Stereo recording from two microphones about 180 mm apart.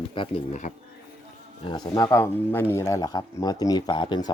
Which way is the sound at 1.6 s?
20° left (ahead or behind).